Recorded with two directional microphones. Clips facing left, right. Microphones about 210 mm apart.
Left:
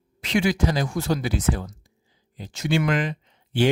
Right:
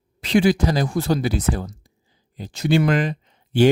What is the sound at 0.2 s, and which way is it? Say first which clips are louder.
Speech: right 5 dB; 35° right (ahead or behind).